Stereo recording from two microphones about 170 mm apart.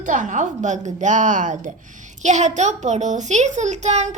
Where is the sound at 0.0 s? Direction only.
50° right (ahead or behind).